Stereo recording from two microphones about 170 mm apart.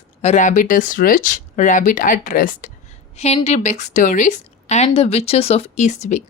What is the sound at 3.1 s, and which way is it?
A woman's voice, 40° left (ahead or behind).